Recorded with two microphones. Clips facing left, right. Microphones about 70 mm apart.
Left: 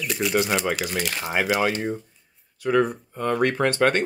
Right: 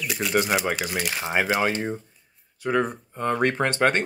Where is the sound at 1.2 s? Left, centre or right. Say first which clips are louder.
Even; right.